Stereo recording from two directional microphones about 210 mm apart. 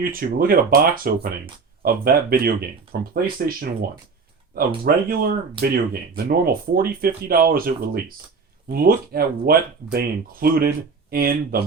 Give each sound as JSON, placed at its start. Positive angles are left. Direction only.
{"t": 0.0, "sound": "speech", "side_deg": -45}
{"t": 5.0, "sound": "speech", "side_deg": -45}